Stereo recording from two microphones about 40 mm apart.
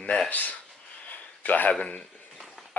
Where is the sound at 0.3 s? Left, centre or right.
Left.